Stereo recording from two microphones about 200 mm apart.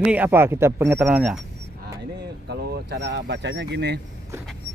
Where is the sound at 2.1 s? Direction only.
55° right (ahead or behind).